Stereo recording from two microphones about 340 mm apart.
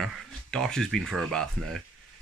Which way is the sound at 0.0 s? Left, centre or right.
Centre.